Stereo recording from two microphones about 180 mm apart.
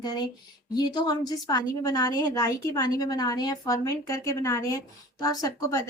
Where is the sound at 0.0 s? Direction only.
20° left (ahead or behind).